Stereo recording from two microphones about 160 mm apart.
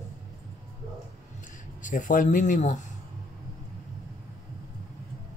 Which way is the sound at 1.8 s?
55° left (ahead or behind).